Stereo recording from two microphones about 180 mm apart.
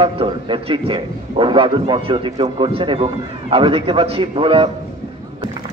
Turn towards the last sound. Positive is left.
turn(degrees=-30)  # may be behind; listen again after turning